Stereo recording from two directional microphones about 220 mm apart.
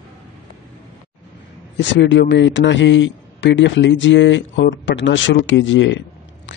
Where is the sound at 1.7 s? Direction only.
55° left (ahead or behind).